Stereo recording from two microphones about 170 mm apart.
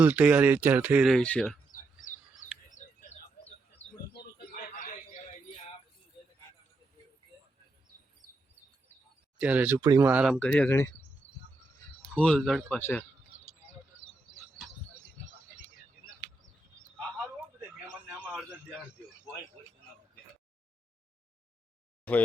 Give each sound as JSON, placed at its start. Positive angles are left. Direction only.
{"t": 0.0, "sound": "speech", "side_deg": -10}
{"t": 1.1, "sound": "speech", "side_deg": 5}
{"t": 1.7, "sound": "bird", "side_deg": 50}
{"t": 9.4, "sound": "speech", "side_deg": -10}
{"t": 10.1, "sound": "speech", "side_deg": -5}
{"t": 10.3, "sound": "speech", "side_deg": 10}
{"t": 12.1, "sound": "speech", "side_deg": 5}
{"t": 17.8, "sound": "a sound", "side_deg": -5}